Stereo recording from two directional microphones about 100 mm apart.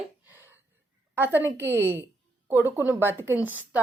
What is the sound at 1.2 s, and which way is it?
A woman's voice, 20° right (ahead or behind).